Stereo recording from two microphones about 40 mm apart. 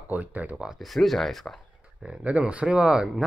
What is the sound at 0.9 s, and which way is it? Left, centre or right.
Speech, centre.